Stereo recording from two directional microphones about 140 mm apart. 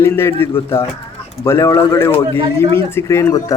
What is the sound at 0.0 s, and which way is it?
A man's voice, 20° left (ahead or behind).